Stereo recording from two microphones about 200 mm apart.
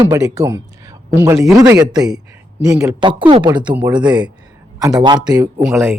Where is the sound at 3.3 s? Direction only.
20° right (ahead or behind).